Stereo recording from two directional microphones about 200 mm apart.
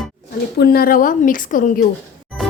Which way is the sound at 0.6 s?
50° left (ahead or behind).